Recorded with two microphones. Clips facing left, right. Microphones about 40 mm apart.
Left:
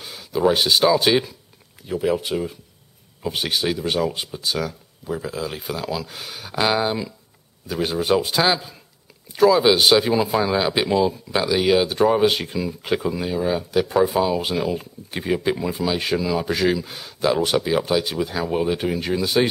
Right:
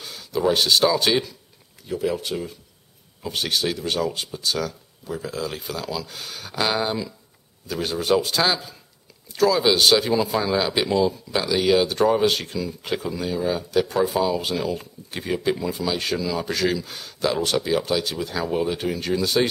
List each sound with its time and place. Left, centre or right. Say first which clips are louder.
0.0 s speech: left 3 dB; centre